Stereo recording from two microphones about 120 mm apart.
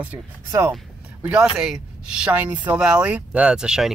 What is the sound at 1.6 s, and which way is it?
Speech, 5° right (ahead or behind).